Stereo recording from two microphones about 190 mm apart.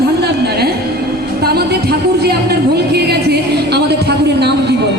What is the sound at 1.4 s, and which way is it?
Music, 55° right (ahead or behind).